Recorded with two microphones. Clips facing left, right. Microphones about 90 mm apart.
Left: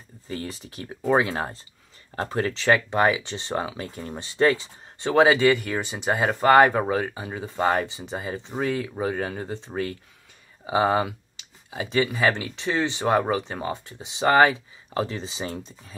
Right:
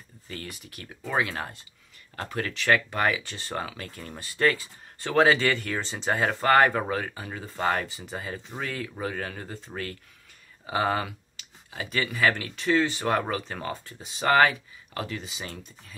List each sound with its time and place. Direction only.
0.3 s speech: 30° left (ahead or behind)